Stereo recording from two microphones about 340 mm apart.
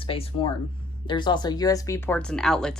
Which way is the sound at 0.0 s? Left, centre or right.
Centre.